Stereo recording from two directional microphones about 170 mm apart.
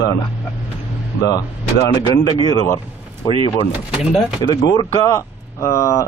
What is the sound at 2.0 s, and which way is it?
Speech, 25° left (ahead or behind).